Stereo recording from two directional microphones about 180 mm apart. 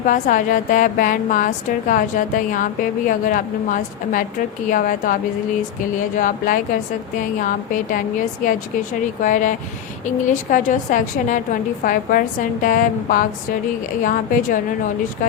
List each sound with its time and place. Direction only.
0.0 s a woman's voice: 45° left (ahead or behind)
6.1 s a woman's voice: 50° left (ahead or behind)